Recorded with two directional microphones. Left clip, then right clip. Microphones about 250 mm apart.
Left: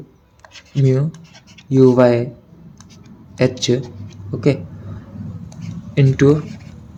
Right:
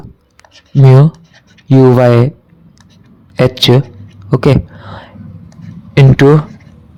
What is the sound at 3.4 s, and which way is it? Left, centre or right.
Speech, right.